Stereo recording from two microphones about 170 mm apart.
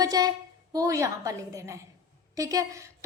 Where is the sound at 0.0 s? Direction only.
20° right (ahead or behind).